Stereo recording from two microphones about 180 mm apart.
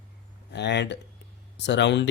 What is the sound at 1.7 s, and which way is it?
Speech, 75° left (ahead or behind).